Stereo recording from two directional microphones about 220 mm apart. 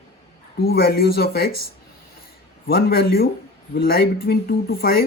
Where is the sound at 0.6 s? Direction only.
45° left (ahead or behind).